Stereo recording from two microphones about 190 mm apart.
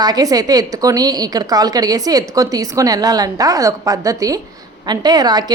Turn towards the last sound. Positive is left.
turn(degrees=-20)  # may be behind; listen again after turning